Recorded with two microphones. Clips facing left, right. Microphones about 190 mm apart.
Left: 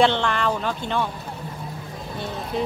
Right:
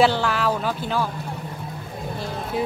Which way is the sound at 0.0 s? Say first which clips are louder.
Even; 5° right (ahead or behind).